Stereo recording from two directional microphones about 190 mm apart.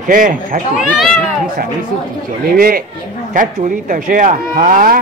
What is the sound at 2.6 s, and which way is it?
Speech, 50° right (ahead or behind).